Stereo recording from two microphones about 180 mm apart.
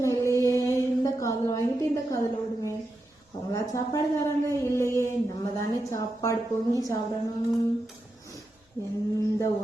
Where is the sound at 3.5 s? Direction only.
15° left (ahead or behind).